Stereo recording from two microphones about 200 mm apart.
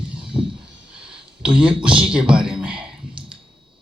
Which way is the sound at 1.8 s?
5° right (ahead or behind).